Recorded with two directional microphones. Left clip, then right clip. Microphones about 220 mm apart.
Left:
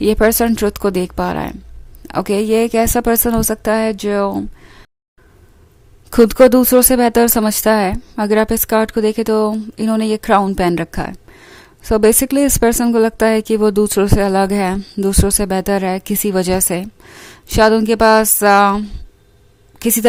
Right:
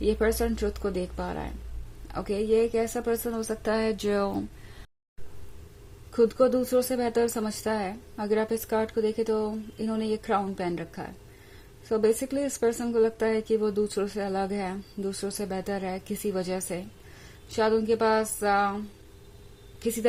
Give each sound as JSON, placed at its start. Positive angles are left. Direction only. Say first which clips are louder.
{"t": 0.0, "sound": "a woman's voice", "louder": "left 12 dB", "side_deg": 40}
{"t": 6.1, "sound": "speech", "louder": "left 14 dB", "side_deg": 50}